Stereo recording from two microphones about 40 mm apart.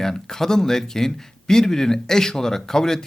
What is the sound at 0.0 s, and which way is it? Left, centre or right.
Speech, centre.